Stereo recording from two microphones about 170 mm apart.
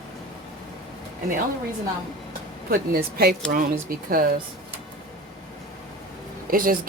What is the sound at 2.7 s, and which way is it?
Speech, 60° right (ahead or behind).